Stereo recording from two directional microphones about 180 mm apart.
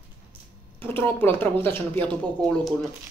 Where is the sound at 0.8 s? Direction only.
10° left (ahead or behind).